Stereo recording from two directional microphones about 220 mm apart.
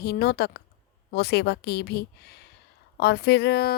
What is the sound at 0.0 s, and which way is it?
A woman's voice, 45° left (ahead or behind).